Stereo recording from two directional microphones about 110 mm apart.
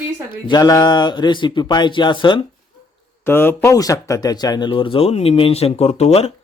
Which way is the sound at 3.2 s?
20° left (ahead or behind).